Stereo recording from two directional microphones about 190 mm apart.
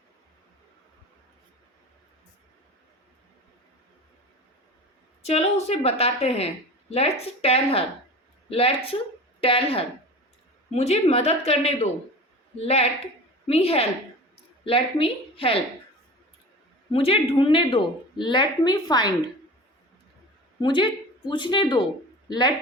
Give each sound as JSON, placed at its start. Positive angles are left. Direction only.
{"t": 5.2, "sound": "a woman's voice", "side_deg": 35}
{"t": 16.9, "sound": "a woman's voice", "side_deg": 30}
{"t": 20.6, "sound": "a woman's voice", "side_deg": 25}